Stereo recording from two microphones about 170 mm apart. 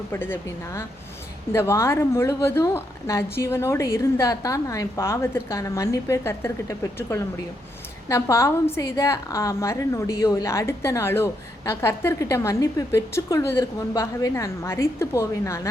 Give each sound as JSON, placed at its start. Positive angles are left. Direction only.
{"t": 0.1, "sound": "a woman's voice", "side_deg": 15}